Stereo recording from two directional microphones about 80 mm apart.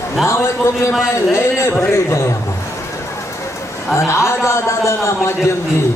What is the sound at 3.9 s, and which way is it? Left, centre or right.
A man's voice, left.